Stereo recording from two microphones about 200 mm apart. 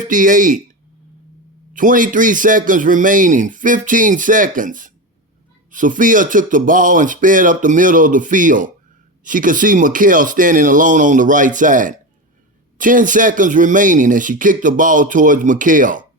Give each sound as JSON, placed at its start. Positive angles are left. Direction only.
{"t": 0.1, "sound": "speech", "side_deg": -40}
{"t": 1.7, "sound": "speech", "side_deg": -40}